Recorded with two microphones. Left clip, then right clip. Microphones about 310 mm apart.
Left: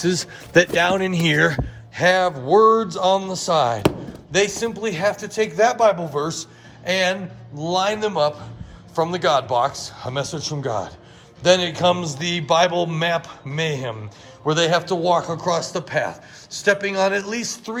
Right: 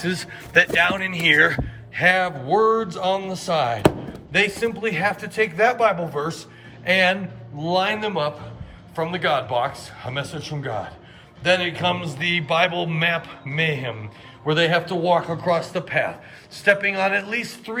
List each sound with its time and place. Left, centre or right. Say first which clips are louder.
0.0 s a man's voice: left 4 dB; centre